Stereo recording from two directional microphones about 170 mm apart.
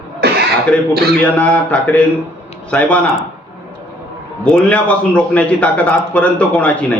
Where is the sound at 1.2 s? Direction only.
10° left (ahead or behind).